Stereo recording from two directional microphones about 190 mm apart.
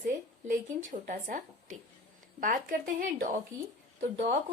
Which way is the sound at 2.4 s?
45° right (ahead or behind).